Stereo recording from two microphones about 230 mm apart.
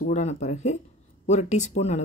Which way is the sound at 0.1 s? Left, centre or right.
Left.